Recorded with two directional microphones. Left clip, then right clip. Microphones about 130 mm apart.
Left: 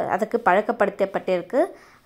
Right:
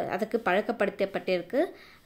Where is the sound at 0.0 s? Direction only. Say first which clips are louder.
Left 8 dB; 15° right (ahead or behind).